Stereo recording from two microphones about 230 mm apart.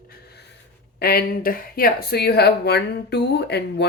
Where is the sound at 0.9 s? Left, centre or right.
Left.